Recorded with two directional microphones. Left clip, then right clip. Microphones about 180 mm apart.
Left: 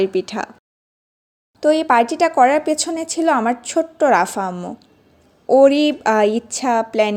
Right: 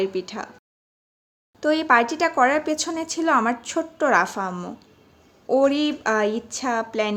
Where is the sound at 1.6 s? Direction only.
20° left (ahead or behind).